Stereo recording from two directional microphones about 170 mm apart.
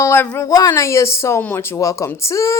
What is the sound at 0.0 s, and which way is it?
Speech, 15° left (ahead or behind).